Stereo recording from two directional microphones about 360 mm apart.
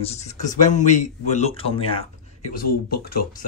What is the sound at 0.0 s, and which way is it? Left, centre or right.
Speech, centre.